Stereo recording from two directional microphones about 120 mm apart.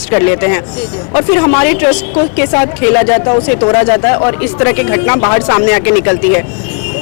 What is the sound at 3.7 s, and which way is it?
A woman's voice, 20° left (ahead or behind).